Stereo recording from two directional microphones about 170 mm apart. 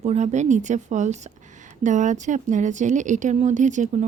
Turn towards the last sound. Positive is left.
turn(degrees=-45)  # may be behind; listen again after turning